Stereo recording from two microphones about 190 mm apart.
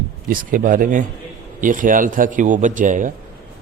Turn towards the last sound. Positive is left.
turn(degrees=-45)  # may be behind; listen again after turning